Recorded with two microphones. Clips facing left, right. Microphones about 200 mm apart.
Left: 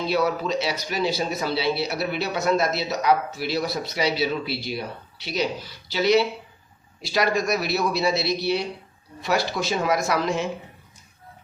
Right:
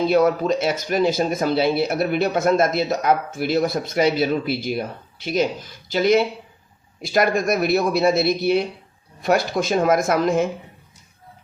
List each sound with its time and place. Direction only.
0.1 s speech: 50° right (ahead or behind)